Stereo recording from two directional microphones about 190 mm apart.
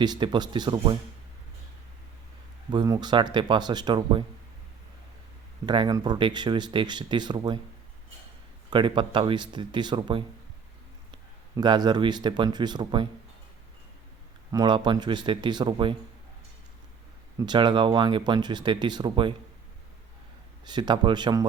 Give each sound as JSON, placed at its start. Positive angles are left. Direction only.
{"t": 0.0, "sound": "speech", "side_deg": -20}
{"t": 2.6, "sound": "speech", "side_deg": -20}
{"t": 5.6, "sound": "speech", "side_deg": -25}
{"t": 8.7, "sound": "speech", "side_deg": -25}
{"t": 14.5, "sound": "speech", "side_deg": -20}
{"t": 17.4, "sound": "speech", "side_deg": -25}
{"t": 20.7, "sound": "speech", "side_deg": -25}